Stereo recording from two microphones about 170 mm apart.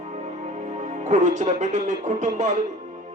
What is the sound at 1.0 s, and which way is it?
Speech, 45° right (ahead or behind).